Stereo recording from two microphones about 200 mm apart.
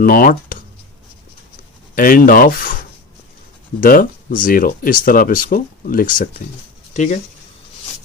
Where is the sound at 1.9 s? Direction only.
45° left (ahead or behind).